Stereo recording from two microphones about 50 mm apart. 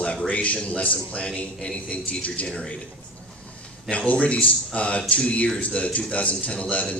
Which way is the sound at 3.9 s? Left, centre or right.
Left.